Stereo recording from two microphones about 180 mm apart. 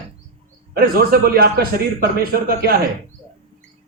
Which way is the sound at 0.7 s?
55° right (ahead or behind).